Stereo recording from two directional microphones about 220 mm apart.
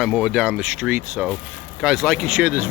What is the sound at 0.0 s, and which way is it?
Speech, 5° right (ahead or behind).